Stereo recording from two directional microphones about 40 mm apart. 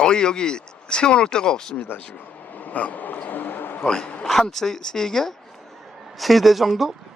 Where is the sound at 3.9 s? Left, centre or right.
Left.